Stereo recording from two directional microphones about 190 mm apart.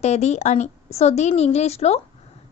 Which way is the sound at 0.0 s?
35° left (ahead or behind).